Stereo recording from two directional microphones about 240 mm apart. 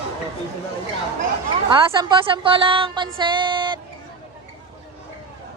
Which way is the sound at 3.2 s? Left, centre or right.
Centre.